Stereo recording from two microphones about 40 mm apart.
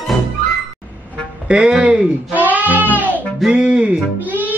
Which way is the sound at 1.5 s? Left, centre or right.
Right.